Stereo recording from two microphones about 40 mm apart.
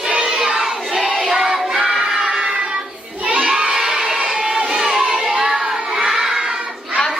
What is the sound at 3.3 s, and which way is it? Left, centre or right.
Children shouting, right.